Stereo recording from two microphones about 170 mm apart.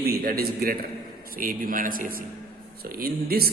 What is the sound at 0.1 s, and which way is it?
A man's voice, 65° right (ahead or behind).